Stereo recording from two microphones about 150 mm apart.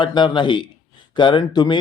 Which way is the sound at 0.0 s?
30° left (ahead or behind).